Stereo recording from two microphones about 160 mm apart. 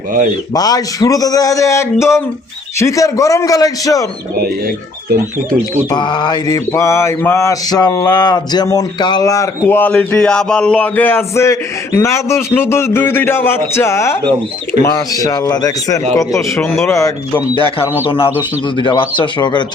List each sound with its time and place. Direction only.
0.5 s mantra: 25° left (ahead or behind)
5.9 s mantra: 30° left (ahead or behind)
11.9 s a sound: 15° left (ahead or behind)
14.8 s mantra: 20° left (ahead or behind)
18.8 s speech: 30° left (ahead or behind)